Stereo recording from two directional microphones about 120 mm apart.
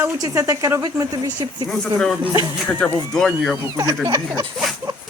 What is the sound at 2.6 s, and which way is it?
Speech, 10° left (ahead or behind).